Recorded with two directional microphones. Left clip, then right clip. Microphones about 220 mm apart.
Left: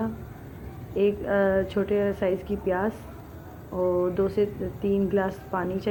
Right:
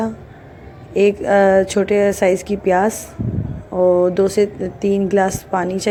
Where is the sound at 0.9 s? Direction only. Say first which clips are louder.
Right 10 dB; 30° right (ahead or behind).